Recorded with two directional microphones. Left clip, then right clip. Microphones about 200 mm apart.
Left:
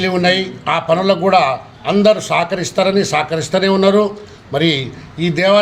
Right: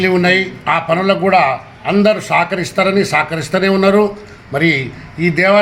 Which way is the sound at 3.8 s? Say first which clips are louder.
Right 2 dB; centre (ahead or behind).